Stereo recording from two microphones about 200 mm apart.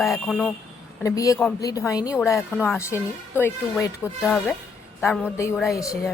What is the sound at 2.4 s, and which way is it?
A woman's voice, 5° left (ahead or behind).